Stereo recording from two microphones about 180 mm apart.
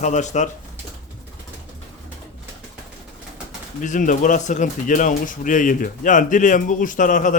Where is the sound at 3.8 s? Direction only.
45° left (ahead or behind).